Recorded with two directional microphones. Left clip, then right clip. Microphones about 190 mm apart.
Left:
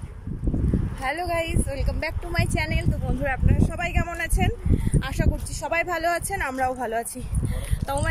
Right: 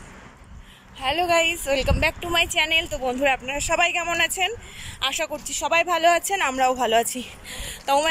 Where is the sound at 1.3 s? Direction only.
Centre (ahead or behind).